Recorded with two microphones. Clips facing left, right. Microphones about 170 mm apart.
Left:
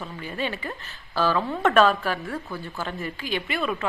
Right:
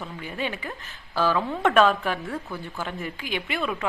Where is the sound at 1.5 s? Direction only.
Centre (ahead or behind).